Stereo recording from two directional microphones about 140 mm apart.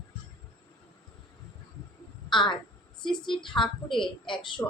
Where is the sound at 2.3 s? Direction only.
35° left (ahead or behind).